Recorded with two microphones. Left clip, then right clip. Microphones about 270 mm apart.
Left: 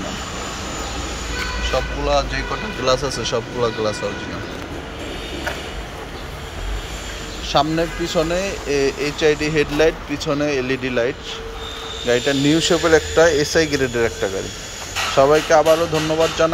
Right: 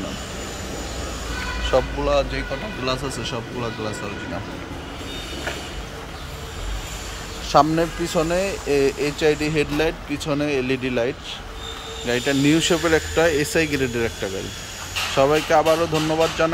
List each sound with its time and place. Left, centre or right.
1.7 s speech: right
2.0 s speech: centre
7.4 s speech: centre